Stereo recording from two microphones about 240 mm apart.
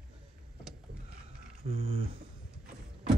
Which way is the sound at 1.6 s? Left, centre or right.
Right.